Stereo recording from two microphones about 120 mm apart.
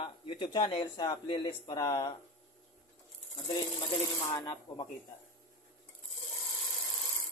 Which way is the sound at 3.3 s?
40° left (ahead or behind).